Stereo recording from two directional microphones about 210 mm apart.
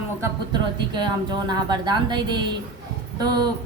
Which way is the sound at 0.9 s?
20° right (ahead or behind).